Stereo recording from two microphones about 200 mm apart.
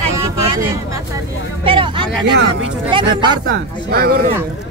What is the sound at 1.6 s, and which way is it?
Speech, 25° right (ahead or behind).